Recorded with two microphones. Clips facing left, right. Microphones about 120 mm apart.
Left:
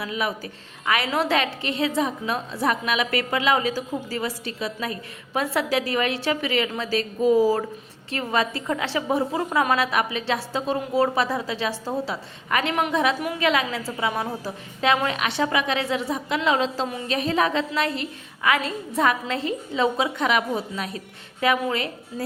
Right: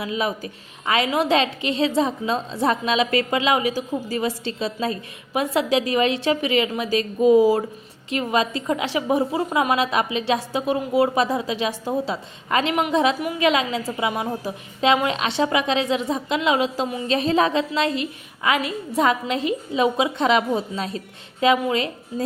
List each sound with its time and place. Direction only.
0.0 s a woman's voice: 20° right (ahead or behind)
17.1 s a woman's voice: 25° right (ahead or behind)